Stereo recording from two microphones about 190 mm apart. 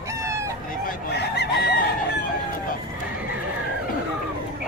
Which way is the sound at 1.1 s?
60° left (ahead or behind).